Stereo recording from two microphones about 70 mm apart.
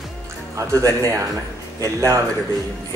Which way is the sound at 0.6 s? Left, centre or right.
Right.